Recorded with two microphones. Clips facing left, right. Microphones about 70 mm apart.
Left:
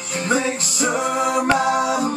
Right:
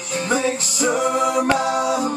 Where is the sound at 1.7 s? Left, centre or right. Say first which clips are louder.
Even; left.